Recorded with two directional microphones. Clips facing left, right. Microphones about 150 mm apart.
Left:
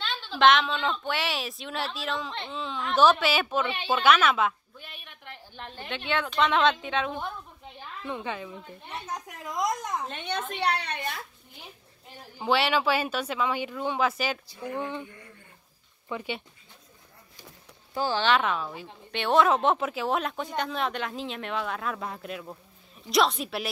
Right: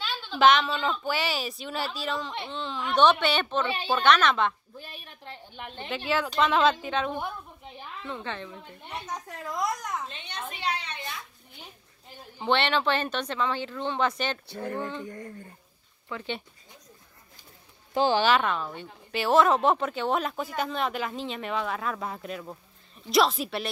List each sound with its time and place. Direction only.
0.0 s a woman's voice: centre (ahead or behind)
4.7 s a sound: 40° right (ahead or behind)
5.5 s a woman's voice: 15° right (ahead or behind)
5.9 s a woman's voice: centre (ahead or behind)
8.0 s speech: 15° left (ahead or behind)
10.6 s a woman's voice: 65° left (ahead or behind)
12.4 s speech: 5° left (ahead or behind)
14.5 s speech: 50° right (ahead or behind)
14.8 s speech: 15° left (ahead or behind)
15.0 s speech: 45° right (ahead or behind)
16.1 s speech: 15° left (ahead or behind)
17.9 s speech: 20° right (ahead or behind)
18.2 s a woman's voice: centre (ahead or behind)